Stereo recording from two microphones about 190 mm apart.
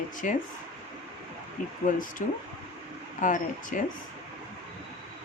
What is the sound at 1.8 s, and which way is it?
Speech, 45° left (ahead or behind).